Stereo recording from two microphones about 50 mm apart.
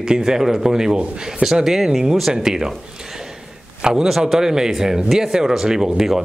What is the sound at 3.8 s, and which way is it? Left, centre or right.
Speech, centre.